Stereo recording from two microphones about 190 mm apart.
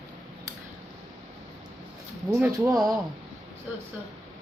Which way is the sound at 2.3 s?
15° right (ahead or behind).